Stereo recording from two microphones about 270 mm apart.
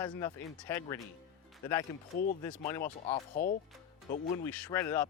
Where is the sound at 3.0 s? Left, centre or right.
Left.